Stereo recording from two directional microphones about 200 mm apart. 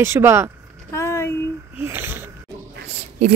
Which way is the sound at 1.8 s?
10° right (ahead or behind).